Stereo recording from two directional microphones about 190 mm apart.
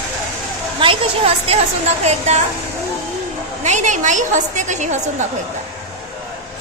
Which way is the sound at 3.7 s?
40° right (ahead or behind).